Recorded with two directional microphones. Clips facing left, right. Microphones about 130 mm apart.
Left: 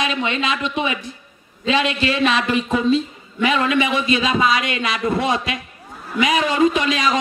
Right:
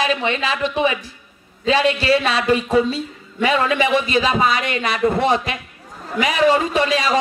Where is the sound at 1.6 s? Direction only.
35° right (ahead or behind).